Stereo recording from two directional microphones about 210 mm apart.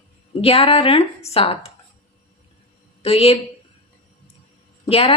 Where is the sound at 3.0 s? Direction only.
30° left (ahead or behind).